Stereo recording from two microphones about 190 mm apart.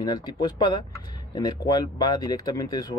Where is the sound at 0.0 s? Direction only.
20° left (ahead or behind).